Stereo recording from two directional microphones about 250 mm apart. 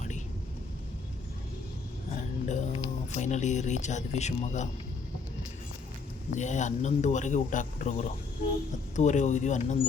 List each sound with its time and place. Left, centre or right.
2.5 s speech: left
6.3 s speech: left